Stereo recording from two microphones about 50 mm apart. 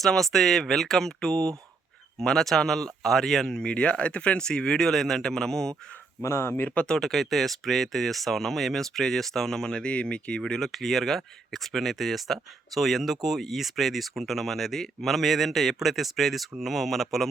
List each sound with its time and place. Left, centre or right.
0.0 s a man's voice: centre
3.7 s speech: left
4.9 s a man's voice: centre
6.2 s speech: left
6.8 s speech: centre
10.4 s speech: centre